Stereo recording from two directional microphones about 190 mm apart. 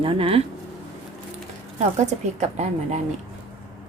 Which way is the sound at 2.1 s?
35° right (ahead or behind).